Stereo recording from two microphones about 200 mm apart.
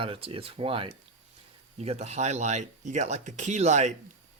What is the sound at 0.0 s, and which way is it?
Speech, 25° right (ahead or behind).